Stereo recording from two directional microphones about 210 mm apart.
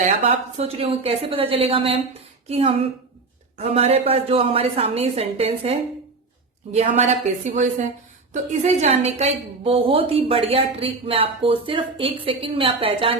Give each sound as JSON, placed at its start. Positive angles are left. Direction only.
{"t": 0.1, "sound": "a woman's voice", "side_deg": -30}
{"t": 6.7, "sound": "a woman's voice", "side_deg": -30}